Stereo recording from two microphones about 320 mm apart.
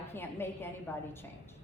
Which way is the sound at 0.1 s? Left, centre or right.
Centre.